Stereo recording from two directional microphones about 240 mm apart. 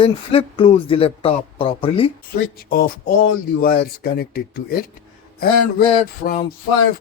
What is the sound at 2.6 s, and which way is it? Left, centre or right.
Speech, left.